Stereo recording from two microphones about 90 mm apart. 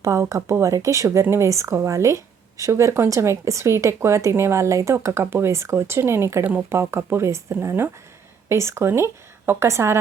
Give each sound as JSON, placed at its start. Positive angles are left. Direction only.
{"t": 0.0, "sound": "speech", "side_deg": -35}